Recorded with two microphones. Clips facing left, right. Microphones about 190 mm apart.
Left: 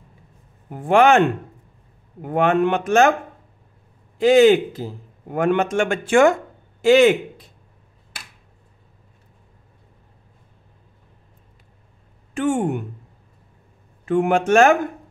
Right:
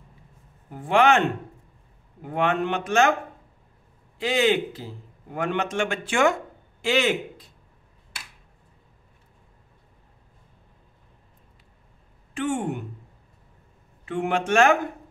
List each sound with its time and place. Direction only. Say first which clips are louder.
0.7 s a man's voice: left 5 dB; 50° left (ahead or behind)
2.2 s a man's voice: left 6 dB; 50° left (ahead or behind)
4.2 s a man's voice: left 10 dB; 45° left (ahead or behind)
12.4 s a man's voice: left 6 dB; 50° left (ahead or behind)
14.0 s a man's voice: left 7 dB; 50° left (ahead or behind)